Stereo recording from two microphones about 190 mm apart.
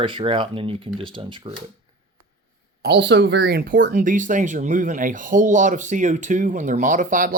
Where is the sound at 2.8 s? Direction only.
65° right (ahead or behind).